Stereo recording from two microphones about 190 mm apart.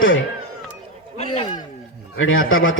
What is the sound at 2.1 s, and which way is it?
Speech, 90° left.